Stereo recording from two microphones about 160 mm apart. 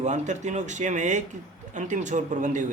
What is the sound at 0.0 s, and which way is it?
Speech, 50° right (ahead or behind).